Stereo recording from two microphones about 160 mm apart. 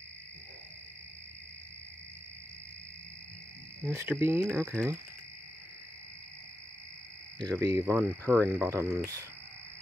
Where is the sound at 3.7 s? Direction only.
15° right (ahead or behind).